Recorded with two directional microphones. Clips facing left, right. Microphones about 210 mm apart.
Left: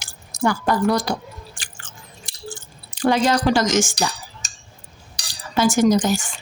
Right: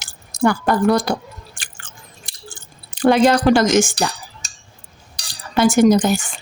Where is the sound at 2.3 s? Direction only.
60° right (ahead or behind).